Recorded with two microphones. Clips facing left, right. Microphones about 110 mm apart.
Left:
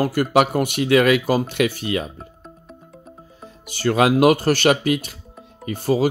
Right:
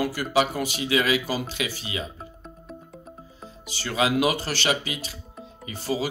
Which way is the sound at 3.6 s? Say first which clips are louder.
Left 8 dB; 50° left (ahead or behind).